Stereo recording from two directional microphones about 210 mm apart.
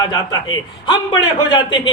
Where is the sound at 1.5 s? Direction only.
25° left (ahead or behind).